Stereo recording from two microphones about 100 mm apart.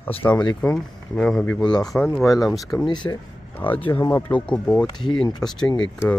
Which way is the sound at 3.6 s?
20° left (ahead or behind).